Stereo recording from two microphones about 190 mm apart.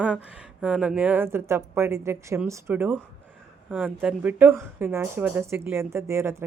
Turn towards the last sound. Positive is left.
turn(degrees=-15)  # may be behind; listen again after turning